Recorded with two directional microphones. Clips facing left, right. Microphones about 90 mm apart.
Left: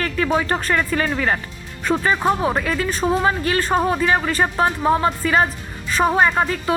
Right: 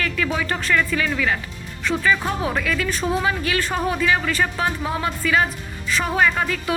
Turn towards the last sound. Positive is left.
turn(degrees=30)  # may be behind; listen again after turning